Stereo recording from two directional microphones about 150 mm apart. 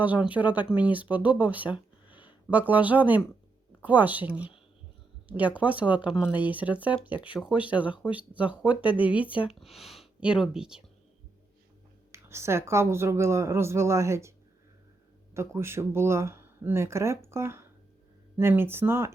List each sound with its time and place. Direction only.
0.0 s speech: 10° right (ahead or behind)
2.0 s a sound: 35° left (ahead or behind)
2.5 s speech: 10° right (ahead or behind)
7.1 s speech: 35° left (ahead or behind)
7.3 s speech: 5° right (ahead or behind)
12.1 s speech: 20° right (ahead or behind)
15.4 s speech: 15° right (ahead or behind)